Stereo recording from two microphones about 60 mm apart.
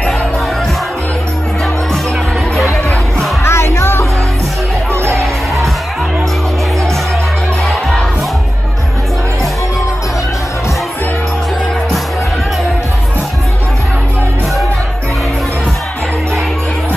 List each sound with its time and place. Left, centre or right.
3.4 s music: left
4.9 s music: right